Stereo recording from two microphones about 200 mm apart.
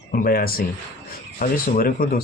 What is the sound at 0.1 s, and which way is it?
Speech, 45° left (ahead or behind).